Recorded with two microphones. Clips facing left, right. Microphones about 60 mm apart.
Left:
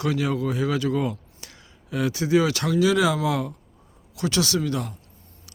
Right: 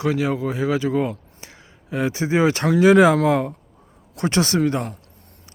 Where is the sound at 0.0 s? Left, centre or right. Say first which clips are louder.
Right 3 dB; right.